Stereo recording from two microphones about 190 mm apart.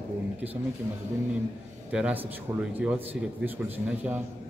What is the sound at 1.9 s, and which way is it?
Speech, 5° right (ahead or behind).